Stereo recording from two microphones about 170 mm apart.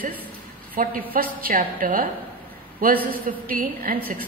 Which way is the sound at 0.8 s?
55° right (ahead or behind).